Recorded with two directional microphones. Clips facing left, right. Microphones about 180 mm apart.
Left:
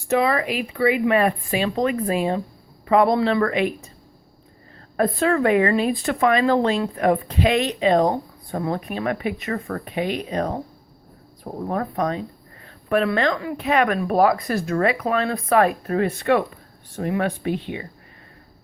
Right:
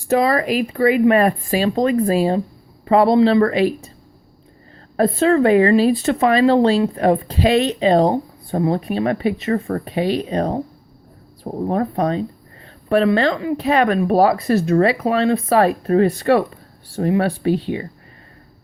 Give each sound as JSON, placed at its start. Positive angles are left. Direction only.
{"t": 0.1, "sound": "a woman's voice", "side_deg": -40}
{"t": 4.9, "sound": "a woman's voice", "side_deg": -25}
{"t": 11.7, "sound": "a woman's voice", "side_deg": -30}